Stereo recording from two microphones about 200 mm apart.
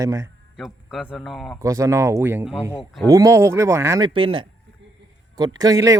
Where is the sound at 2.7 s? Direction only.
10° left (ahead or behind).